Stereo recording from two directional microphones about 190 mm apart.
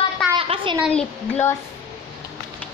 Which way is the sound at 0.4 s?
30° right (ahead or behind).